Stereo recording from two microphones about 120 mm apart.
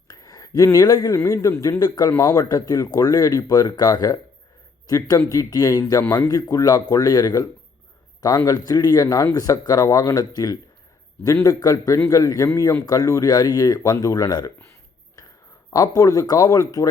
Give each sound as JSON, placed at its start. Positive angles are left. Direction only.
{"t": 0.1, "sound": "a man's voice", "side_deg": 30}
{"t": 15.7, "sound": "speech", "side_deg": 30}